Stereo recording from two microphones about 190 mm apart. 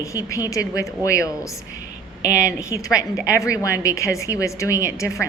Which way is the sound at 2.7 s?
10° right (ahead or behind).